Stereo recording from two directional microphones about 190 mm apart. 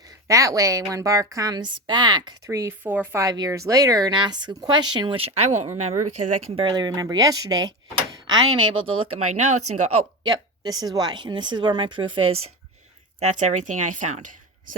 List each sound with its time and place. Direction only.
0.3 s a woman's voice: 15° right (ahead or behind); by 6.7 s 40° right (ahead or behind)
6.7 s a woman's voice: 20° right (ahead or behind)
9.1 s speech: 40° right (ahead or behind)
10.2 s a woman's voice: 20° right (ahead or behind)
13.1 s speech: 40° right (ahead or behind)